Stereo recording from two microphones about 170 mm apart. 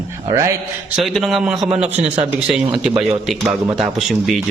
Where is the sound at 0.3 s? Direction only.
20° right (ahead or behind).